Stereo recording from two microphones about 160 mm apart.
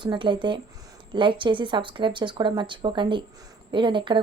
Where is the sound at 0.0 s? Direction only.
30° right (ahead or behind).